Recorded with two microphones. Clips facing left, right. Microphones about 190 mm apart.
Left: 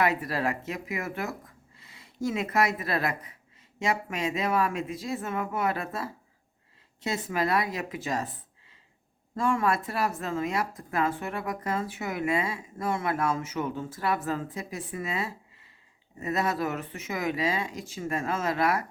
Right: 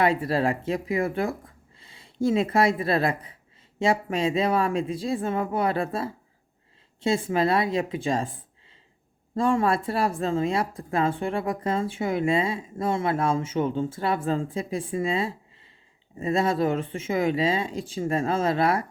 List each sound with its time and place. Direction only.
0.0 s speech: 30° right (ahead or behind)